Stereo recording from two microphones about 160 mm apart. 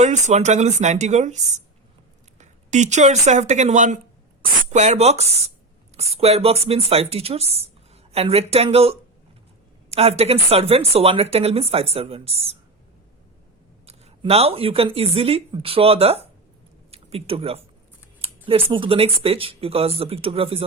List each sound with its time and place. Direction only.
0.0 s speech: 45° right (ahead or behind)
13.8 s speech: 40° right (ahead or behind)